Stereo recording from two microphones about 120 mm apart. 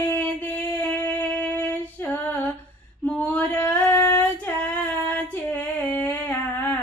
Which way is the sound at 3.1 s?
10° left (ahead or behind).